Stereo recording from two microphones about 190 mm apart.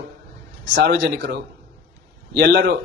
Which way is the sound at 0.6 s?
65° right (ahead or behind).